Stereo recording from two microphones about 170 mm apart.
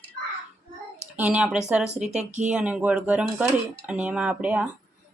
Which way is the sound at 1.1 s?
10° right (ahead or behind).